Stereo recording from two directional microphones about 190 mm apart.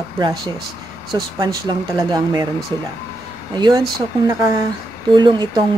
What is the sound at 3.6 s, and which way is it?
Speech, 25° right (ahead or behind).